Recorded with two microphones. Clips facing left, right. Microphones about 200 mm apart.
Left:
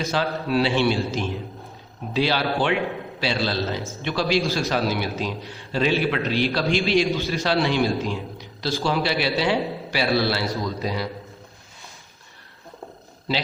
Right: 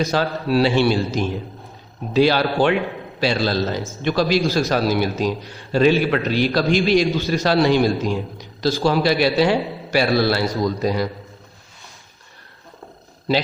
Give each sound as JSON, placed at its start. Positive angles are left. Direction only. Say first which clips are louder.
{"t": 0.1, "sound": "a man's voice", "louder": "right 3 dB", "side_deg": -40}